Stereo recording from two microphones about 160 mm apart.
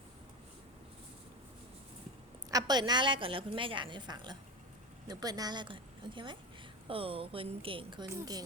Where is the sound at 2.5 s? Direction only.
25° right (ahead or behind).